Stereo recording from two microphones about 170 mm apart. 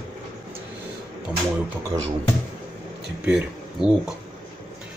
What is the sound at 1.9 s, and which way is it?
Speech, 25° right (ahead or behind).